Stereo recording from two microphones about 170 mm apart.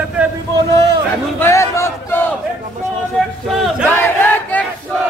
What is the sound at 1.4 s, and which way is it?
Battle cry, 15° left (ahead or behind).